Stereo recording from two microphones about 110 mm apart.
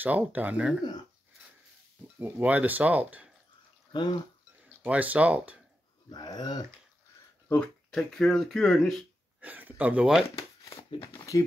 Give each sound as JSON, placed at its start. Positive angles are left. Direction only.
{"t": 0.0, "sound": "speech", "side_deg": -15}
{"t": 2.1, "sound": "speech", "side_deg": -15}
{"t": 3.9, "sound": "speech", "side_deg": 45}
{"t": 4.8, "sound": "speech", "side_deg": -15}
{"t": 6.0, "sound": "speech", "side_deg": 40}
{"t": 7.4, "sound": "speech", "side_deg": 15}
{"t": 7.9, "sound": "speech", "side_deg": 5}
{"t": 9.4, "sound": "speech", "side_deg": -15}
{"t": 11.0, "sound": "speech", "side_deg": 35}